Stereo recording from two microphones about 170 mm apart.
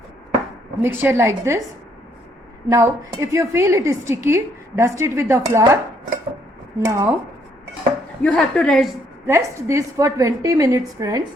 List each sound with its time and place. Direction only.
0.8 s a woman's voice: 15° right (ahead or behind)
2.6 s a woman's voice: 20° right (ahead or behind)
8.2 s a woman's voice: 5° left (ahead or behind)
9.2 s a woman's voice: 15° right (ahead or behind)